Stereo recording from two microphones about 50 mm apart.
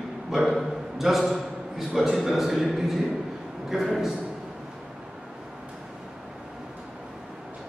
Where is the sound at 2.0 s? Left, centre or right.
Centre.